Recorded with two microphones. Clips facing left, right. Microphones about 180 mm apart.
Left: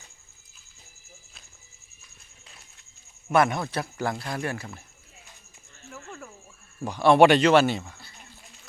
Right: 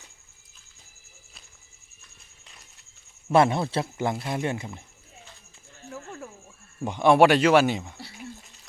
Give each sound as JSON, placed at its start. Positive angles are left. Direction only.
{"t": 3.3, "sound": "speech", "side_deg": -25}
{"t": 6.8, "sound": "speech", "side_deg": -20}
{"t": 7.2, "sound": "a man's voice", "side_deg": -5}